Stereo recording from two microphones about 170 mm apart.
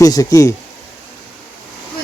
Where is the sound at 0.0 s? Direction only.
20° left (ahead or behind).